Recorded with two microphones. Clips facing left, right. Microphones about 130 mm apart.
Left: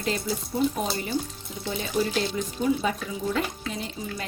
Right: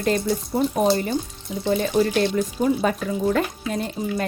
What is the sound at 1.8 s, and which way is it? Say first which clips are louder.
Speech: right 4 dB; 55° right (ahead or behind).